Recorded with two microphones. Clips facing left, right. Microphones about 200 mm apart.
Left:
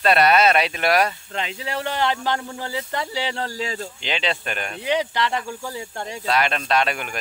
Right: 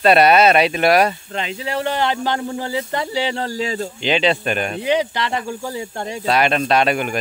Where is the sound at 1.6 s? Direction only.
10° right (ahead or behind).